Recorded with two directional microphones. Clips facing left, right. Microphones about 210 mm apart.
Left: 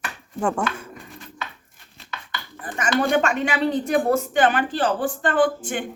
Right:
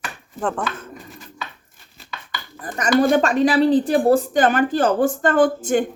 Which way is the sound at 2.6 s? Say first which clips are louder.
Right 5 dB; 40° right (ahead or behind).